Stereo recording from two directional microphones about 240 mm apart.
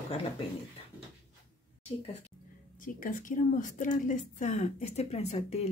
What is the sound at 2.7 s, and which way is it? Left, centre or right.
A woman's voice, left.